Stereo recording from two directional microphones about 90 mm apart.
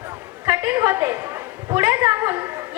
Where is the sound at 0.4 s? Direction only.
20° right (ahead or behind).